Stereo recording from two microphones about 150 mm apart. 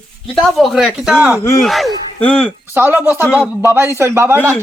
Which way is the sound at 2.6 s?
15° right (ahead or behind).